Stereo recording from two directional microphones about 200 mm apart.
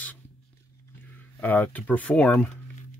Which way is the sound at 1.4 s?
10° left (ahead or behind).